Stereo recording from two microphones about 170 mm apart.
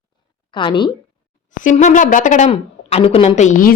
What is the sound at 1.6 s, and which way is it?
Speech, 45° left (ahead or behind).